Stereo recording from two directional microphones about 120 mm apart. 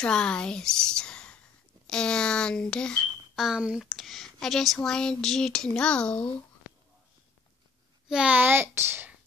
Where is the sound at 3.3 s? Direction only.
5° right (ahead or behind).